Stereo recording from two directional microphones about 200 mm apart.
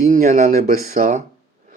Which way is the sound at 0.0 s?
40° right (ahead or behind).